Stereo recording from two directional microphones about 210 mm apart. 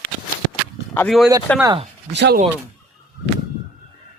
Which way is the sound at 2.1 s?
55° right (ahead or behind).